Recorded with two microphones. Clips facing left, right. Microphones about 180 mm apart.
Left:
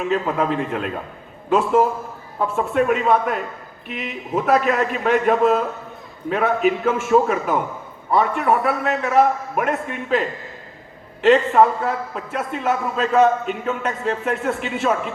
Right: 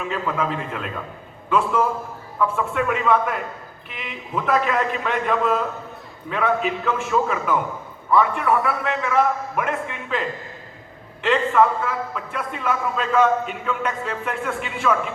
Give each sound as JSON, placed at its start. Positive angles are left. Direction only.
{"t": 0.0, "sound": "a man's voice", "side_deg": 40}